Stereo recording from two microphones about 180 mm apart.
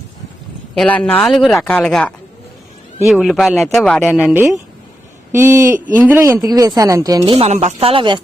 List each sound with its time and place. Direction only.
0.8 s speech: 10° left (ahead or behind); by 8.2 s 30° right (ahead or behind)